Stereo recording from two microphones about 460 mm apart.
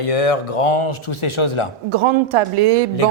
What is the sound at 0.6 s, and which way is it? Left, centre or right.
Speech, left.